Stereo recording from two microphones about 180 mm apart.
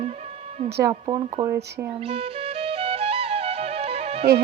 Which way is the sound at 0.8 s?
25° right (ahead or behind).